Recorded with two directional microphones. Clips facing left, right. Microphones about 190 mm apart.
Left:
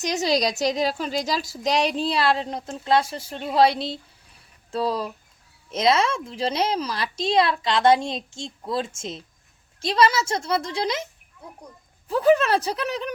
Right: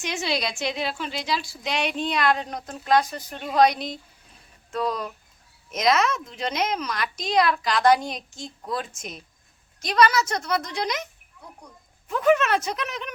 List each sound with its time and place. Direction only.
0.0 s a woman's voice: 40° left (ahead or behind)